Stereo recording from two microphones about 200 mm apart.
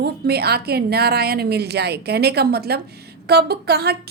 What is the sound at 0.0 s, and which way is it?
A woman's voice, 55° right (ahead or behind).